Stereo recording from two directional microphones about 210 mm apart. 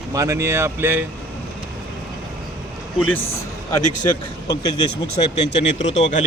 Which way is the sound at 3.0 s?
70° left (ahead or behind).